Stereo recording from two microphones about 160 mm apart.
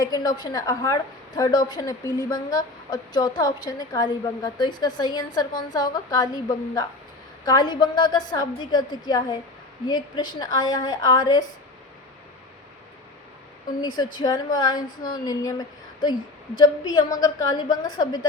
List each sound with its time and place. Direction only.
0.0 s a woman's voice: 25° left (ahead or behind)
13.8 s a woman's voice: 25° left (ahead or behind)
14.8 s a woman's voice: 60° left (ahead or behind)
15.2 s a woman's voice: 25° left (ahead or behind)